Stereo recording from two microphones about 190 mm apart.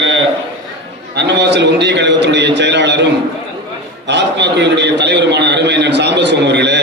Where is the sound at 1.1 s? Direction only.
65° right (ahead or behind).